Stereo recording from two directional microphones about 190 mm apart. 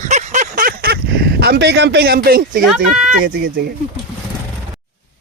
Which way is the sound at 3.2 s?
55° right (ahead or behind).